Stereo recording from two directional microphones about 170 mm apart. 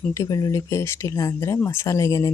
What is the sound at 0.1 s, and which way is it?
Speech, 20° left (ahead or behind).